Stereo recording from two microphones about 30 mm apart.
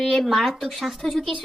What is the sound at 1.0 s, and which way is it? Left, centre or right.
Speech, centre.